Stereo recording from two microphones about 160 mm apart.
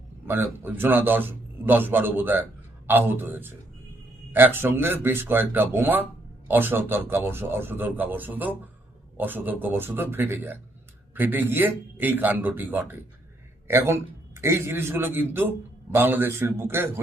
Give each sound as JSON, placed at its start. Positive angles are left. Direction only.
{"t": 0.3, "sound": "a man's voice", "side_deg": -15}